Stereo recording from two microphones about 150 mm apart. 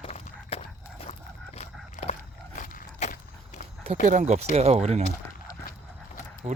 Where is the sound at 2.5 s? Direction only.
60° left (ahead or behind).